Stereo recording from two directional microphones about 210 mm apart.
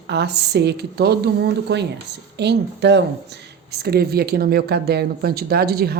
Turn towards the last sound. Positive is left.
turn(degrees=-45)  # may be behind; listen again after turning